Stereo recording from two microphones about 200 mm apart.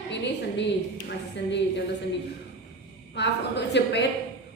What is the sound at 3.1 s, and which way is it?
Speech, 60° left (ahead or behind).